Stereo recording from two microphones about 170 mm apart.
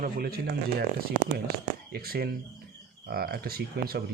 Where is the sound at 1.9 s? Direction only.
65° right (ahead or behind).